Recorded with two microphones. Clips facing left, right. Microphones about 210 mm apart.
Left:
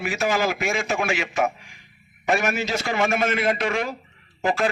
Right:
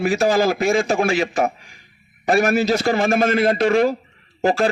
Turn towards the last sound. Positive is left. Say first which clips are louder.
# right 5 dB
turn(degrees=-35)  # may be behind; listen again after turning